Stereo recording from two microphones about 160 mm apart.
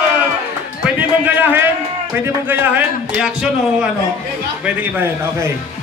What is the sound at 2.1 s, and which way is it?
A man's voice, 15° right (ahead or behind).